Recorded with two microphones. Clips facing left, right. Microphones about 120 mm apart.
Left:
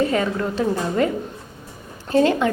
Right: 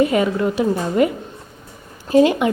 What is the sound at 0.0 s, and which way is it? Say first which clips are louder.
A woman's voice: right 4 dB; 15° right (ahead or behind).